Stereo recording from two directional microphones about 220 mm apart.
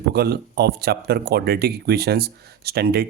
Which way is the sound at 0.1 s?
45° right (ahead or behind).